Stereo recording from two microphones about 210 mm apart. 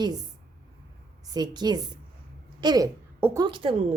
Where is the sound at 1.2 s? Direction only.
20° right (ahead or behind).